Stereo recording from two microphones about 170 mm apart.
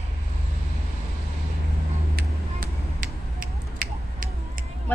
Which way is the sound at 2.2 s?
55° right (ahead or behind).